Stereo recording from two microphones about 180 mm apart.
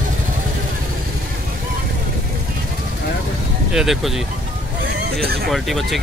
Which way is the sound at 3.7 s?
Centre (ahead or behind).